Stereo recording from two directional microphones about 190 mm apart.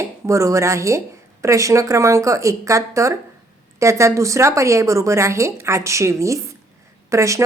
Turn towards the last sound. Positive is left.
turn(degrees=-15)  # may be behind; listen again after turning